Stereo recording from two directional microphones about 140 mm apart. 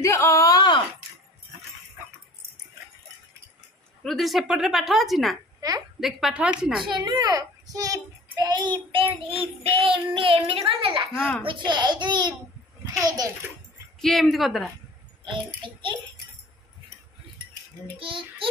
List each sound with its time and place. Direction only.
0.0 s a sound: 20° left (ahead or behind)
4.0 s a woman's voice: centre (ahead or behind)
5.6 s a woman's voice: 25° right (ahead or behind)
5.9 s a woman's voice: centre (ahead or behind)
6.9 s a child's voice: 30° right (ahead or behind)
11.1 s a child's voice: 5° left (ahead or behind)
11.4 s a child's voice: 35° right (ahead or behind)
14.0 s a woman's voice: centre (ahead or behind)
15.2 s a child's voice: 35° right (ahead or behind)
17.9 s a child's voice: 40° right (ahead or behind)